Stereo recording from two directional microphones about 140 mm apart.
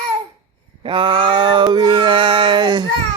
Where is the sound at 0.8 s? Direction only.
35° right (ahead or behind).